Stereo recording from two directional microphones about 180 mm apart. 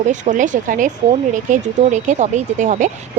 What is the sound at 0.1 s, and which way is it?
A woman's voice, 45° right (ahead or behind).